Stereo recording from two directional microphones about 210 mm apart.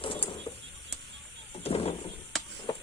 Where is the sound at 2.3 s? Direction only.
Centre (ahead or behind).